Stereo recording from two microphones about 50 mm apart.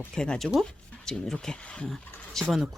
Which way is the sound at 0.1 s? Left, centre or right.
Centre.